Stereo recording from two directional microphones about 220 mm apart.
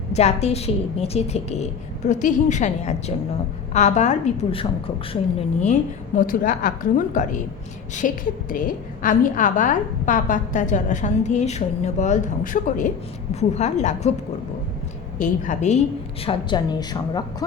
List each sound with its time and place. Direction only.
0.1 s a woman's voice: 30° left (ahead or behind)
6.1 s a woman's voice: 40° left (ahead or behind)
15.2 s a woman's voice: 35° left (ahead or behind)
16.2 s a woman's voice: 20° left (ahead or behind)